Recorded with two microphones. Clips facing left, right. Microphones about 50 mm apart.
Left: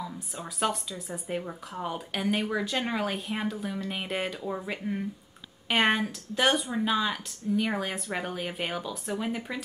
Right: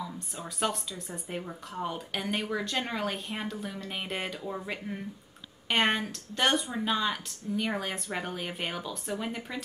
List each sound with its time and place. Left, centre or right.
0.0 s speech: centre